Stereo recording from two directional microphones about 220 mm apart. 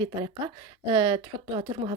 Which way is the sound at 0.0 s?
20° right (ahead or behind).